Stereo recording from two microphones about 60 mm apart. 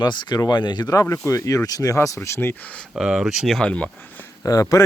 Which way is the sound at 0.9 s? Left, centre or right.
Left.